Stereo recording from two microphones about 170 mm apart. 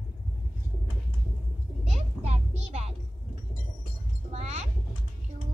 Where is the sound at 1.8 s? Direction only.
40° right (ahead or behind).